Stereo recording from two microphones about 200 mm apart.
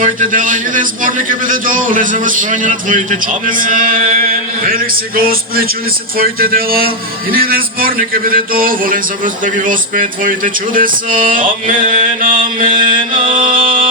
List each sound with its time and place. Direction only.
0.0 s a man's voice: 40° right (ahead or behind)